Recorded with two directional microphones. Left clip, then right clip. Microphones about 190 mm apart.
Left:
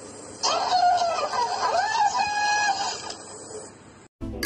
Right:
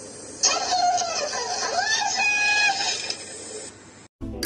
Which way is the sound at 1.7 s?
25° left (ahead or behind).